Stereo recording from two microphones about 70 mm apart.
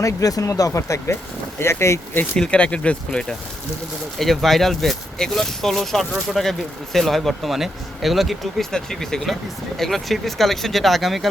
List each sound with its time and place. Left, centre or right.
0.0 s speech: left
2.4 s speech: centre
4.2 s speech: centre